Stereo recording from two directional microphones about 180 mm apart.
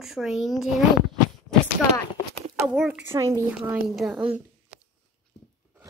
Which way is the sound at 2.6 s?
5° right (ahead or behind).